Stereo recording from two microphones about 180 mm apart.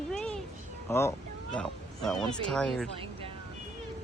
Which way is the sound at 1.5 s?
5° left (ahead or behind).